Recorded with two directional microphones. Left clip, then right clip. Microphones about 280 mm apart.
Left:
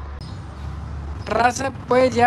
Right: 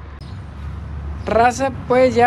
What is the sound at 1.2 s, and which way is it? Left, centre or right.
Speech, centre.